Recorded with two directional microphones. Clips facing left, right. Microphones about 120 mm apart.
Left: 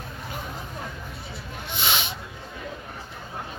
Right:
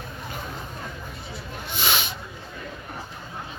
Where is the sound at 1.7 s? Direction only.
25° left (ahead or behind).